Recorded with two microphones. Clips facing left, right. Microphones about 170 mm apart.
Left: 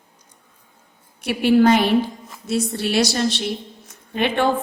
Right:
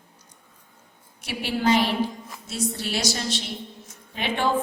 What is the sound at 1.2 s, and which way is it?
A woman's voice, 60° left (ahead or behind).